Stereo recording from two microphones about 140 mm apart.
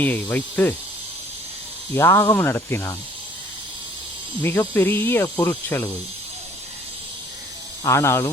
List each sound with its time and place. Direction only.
0.0 s speech: 10° left (ahead or behind)
2.0 s speech: 20° left (ahead or behind)
4.7 s speech: 15° left (ahead or behind)
7.9 s speech: 20° left (ahead or behind)